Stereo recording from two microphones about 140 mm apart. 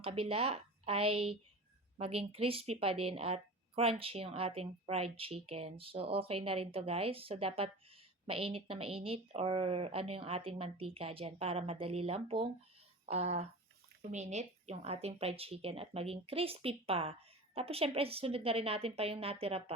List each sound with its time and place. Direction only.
0.0 s a woman's voice: 40° right (ahead or behind)